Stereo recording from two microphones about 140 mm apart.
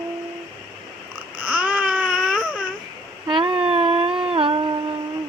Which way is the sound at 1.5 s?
10° right (ahead or behind).